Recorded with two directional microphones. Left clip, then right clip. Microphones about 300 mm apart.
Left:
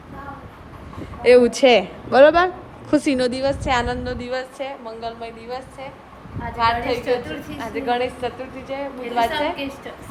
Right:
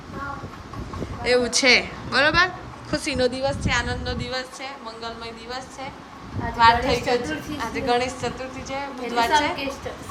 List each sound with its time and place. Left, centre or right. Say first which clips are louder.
1.2 s a woman's voice: left 7 dB; centre
3.7 s a woman's voice: left 5 dB; centre
4.0 s a woman's voice: left 2 dB; centre